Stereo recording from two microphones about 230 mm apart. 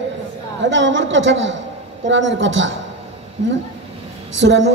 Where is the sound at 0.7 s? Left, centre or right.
Right.